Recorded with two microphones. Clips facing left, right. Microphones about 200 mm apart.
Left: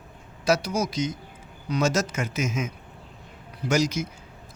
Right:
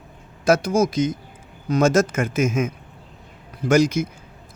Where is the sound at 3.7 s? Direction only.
55° right (ahead or behind).